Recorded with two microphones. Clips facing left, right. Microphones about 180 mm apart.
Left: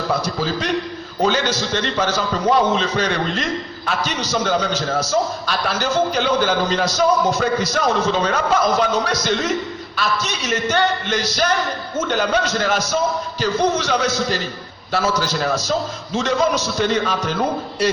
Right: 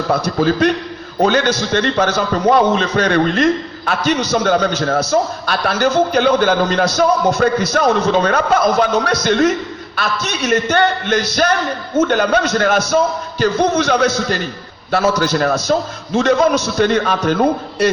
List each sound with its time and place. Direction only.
0.1 s a man's voice: 55° right (ahead or behind)